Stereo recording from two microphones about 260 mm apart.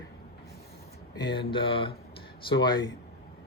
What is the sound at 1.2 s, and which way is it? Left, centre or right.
Speech, centre.